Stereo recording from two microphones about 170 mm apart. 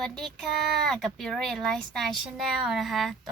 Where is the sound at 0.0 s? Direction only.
5° left (ahead or behind).